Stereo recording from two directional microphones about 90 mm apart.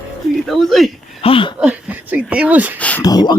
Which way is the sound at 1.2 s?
80° left.